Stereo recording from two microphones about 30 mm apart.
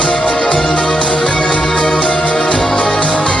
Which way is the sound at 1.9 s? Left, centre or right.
Left.